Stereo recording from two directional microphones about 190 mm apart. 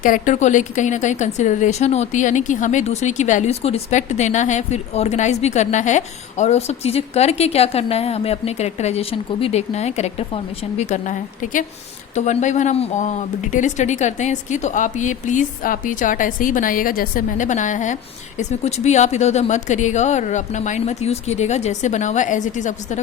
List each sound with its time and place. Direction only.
0.0 s a woman's voice: 45° left (ahead or behind)
12.1 s a woman's voice: 40° left (ahead or behind)